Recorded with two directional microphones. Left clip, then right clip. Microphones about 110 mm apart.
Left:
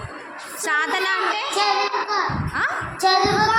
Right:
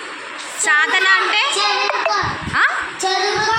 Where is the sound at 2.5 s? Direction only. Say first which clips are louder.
Right 8 dB; 10° left (ahead or behind).